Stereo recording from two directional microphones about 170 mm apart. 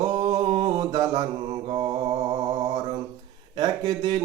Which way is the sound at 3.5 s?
20° right (ahead or behind).